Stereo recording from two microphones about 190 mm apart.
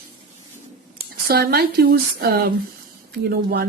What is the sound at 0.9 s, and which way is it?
Speech, 55° right (ahead or behind).